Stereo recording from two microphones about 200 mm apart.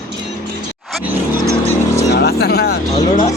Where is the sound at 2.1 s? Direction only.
50° left (ahead or behind).